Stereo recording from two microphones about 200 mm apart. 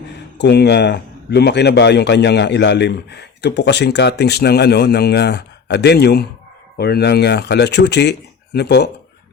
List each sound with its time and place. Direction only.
0.3 s a man's voice: 55° left (ahead or behind)